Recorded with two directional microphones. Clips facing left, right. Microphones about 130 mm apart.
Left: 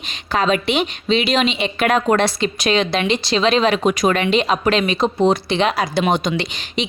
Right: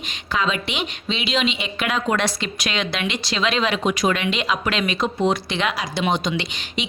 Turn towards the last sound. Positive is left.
turn(degrees=40)  # may be behind; listen again after turning